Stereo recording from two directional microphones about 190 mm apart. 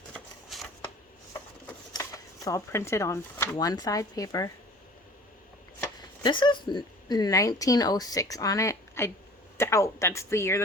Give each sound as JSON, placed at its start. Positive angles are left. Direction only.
{"t": 0.1, "sound": "shuffling cards", "side_deg": 0}
{"t": 1.9, "sound": "speech", "side_deg": 20}
{"t": 5.8, "sound": "speech", "side_deg": 25}